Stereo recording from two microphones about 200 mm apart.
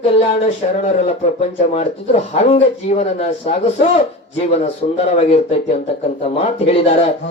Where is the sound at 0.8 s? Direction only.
35° left (ahead or behind).